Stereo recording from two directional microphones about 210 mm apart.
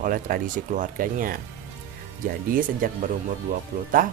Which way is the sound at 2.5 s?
40° right (ahead or behind).